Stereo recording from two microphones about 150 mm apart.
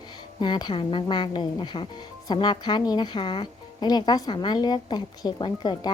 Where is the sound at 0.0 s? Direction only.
30° left (ahead or behind).